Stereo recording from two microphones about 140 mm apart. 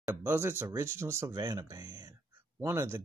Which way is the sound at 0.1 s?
15° right (ahead or behind).